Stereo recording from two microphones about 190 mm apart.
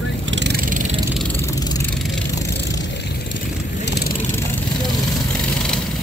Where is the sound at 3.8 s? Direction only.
55° left (ahead or behind).